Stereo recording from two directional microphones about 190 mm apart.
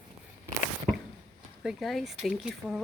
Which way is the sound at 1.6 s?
Centre (ahead or behind).